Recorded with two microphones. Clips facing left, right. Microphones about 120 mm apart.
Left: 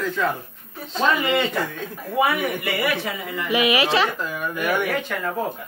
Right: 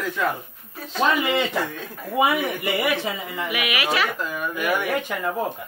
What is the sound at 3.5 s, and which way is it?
Speech, 30° left (ahead or behind).